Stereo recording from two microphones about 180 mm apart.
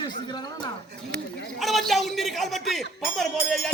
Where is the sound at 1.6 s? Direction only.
Centre (ahead or behind).